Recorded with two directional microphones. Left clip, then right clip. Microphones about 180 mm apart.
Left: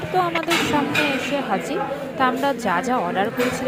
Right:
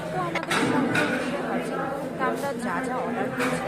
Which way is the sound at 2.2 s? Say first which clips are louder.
Left 9 dB; 30° left (ahead or behind).